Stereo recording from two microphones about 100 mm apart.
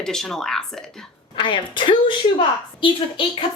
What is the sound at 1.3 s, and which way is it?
A woman's voice, 55° left (ahead or behind).